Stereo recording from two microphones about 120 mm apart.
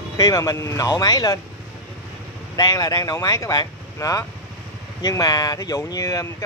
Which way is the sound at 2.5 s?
30° left (ahead or behind).